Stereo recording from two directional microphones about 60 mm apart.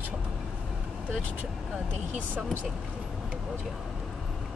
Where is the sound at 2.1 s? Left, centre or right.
Right.